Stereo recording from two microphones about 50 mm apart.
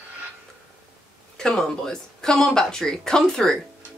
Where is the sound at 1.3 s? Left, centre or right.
Centre.